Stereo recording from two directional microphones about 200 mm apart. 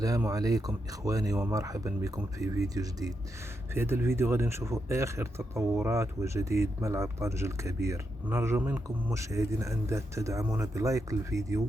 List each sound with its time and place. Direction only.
0.0 s speech: 15° right (ahead or behind)